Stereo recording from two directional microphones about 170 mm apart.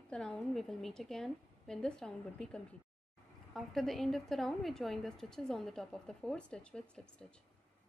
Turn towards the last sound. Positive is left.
turn(degrees=5)  # may be behind; listen again after turning